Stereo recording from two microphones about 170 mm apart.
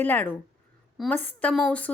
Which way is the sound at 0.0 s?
10° left (ahead or behind).